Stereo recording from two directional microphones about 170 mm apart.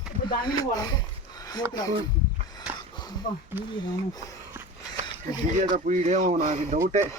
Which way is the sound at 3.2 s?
50° left (ahead or behind).